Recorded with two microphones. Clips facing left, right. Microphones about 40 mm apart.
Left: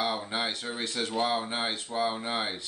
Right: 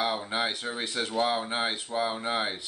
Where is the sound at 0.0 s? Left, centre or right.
Centre.